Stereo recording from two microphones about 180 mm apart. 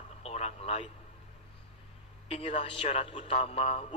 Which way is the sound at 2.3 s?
35° left (ahead or behind).